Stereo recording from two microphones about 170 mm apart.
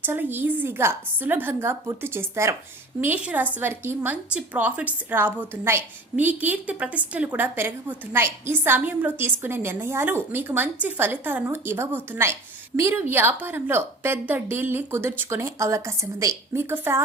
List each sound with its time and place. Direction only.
0.0 s a woman's voice: 10° right (ahead or behind)